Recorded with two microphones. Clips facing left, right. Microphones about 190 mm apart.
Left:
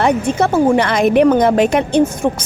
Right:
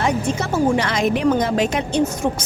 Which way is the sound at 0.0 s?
60° left (ahead or behind).